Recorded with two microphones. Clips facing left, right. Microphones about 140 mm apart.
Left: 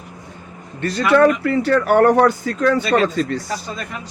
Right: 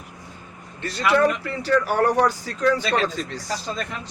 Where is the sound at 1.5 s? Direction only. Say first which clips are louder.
Left 6 dB; 60° left (ahead or behind).